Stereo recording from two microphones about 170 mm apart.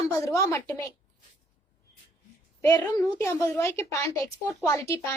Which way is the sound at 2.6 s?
20° left (ahead or behind).